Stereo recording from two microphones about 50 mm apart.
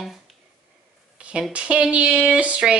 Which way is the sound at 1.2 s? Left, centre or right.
Centre.